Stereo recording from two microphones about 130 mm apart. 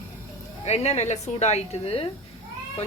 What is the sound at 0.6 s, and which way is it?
A woman's voice, 55° left (ahead or behind).